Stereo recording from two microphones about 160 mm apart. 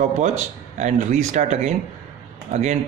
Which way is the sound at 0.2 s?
50° right (ahead or behind).